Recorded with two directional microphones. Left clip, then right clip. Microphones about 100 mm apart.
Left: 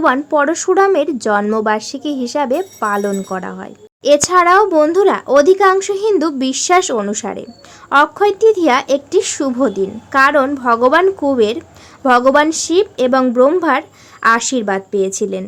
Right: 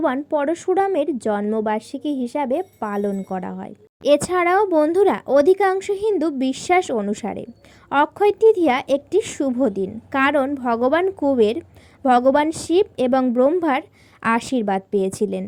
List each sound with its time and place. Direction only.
0.0 s speech: 35° right (ahead or behind)
11.3 s a woman's voice: 55° right (ahead or behind)